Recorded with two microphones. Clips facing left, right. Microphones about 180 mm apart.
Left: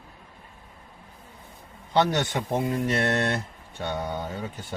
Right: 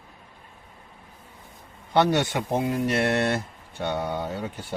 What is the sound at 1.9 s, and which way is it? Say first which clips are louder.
Speech: right 2 dB; 10° right (ahead or behind).